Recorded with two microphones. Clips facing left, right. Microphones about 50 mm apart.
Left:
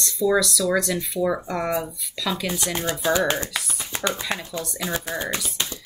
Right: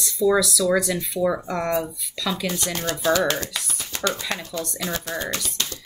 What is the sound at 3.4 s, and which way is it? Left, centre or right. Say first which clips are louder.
Speech: left 2 dB; centre.